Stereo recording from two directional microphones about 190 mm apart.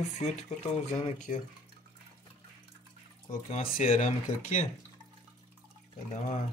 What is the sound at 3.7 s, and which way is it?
Speech, 40° left (ahead or behind).